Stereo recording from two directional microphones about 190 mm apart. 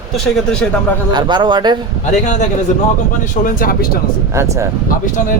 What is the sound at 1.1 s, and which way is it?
Speech, 25° right (ahead or behind).